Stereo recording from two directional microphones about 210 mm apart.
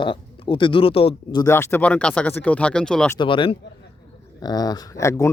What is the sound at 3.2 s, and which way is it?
Speech, 25° left (ahead or behind).